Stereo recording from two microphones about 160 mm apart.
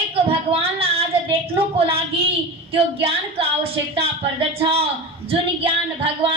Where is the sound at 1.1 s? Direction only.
35° right (ahead or behind).